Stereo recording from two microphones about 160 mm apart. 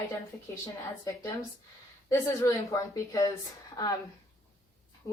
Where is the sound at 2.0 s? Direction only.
20° left (ahead or behind).